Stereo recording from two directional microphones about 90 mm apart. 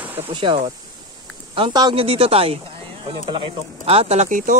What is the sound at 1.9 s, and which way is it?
Speech, 90° right.